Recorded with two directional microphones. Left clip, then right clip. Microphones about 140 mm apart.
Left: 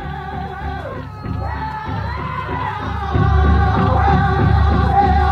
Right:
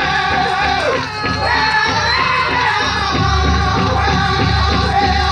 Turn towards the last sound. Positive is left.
turn(degrees=25)  # may be behind; listen again after turning